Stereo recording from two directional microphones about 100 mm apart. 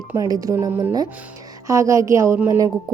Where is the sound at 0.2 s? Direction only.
35° right (ahead or behind).